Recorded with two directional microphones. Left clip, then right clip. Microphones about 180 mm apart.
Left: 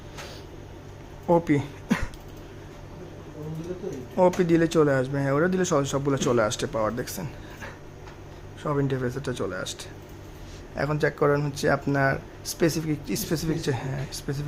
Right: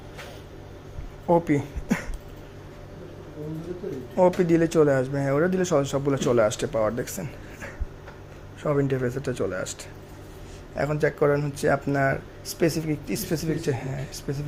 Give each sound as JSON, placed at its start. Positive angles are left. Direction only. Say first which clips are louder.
{"t": 1.3, "sound": "a sound", "louder": "even", "side_deg": 5}
{"t": 4.1, "sound": "speech", "louder": "right 1 dB", "side_deg": 5}
{"t": 10.8, "sound": "speech", "louder": "right 1 dB", "side_deg": 0}